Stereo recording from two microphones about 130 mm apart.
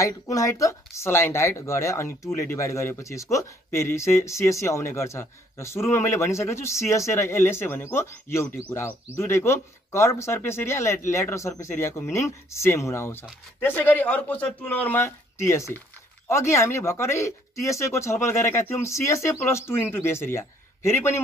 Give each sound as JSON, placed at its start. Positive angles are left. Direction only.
{"t": 0.0, "sound": "speech", "side_deg": 25}